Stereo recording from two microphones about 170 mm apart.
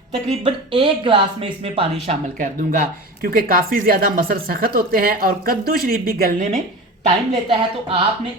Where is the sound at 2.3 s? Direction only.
50° right (ahead or behind).